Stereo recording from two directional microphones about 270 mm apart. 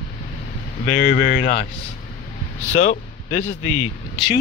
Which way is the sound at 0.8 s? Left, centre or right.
Left.